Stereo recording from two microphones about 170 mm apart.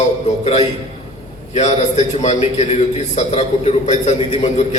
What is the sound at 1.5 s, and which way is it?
A man's voice, 45° left (ahead or behind).